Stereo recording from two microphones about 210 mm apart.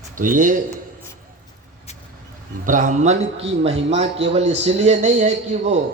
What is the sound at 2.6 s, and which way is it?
A man's voice, 35° right (ahead or behind).